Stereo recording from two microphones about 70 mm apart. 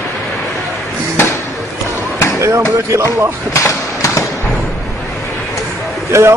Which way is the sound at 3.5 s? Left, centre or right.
Left.